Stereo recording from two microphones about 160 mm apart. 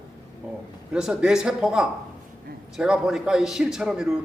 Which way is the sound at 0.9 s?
5° right (ahead or behind).